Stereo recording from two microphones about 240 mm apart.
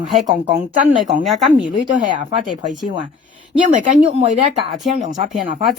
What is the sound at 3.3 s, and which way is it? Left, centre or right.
Speech, right.